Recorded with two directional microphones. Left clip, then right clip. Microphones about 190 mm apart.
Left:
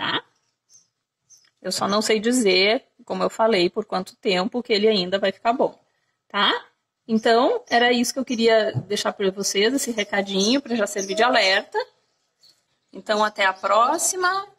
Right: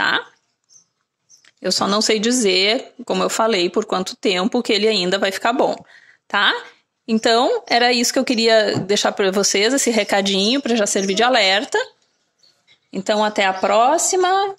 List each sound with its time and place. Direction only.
1.6 s speech: 30° right (ahead or behind)
12.9 s speech: 15° right (ahead or behind)